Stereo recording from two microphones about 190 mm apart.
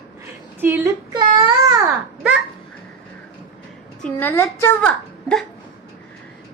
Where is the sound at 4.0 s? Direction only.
10° left (ahead or behind).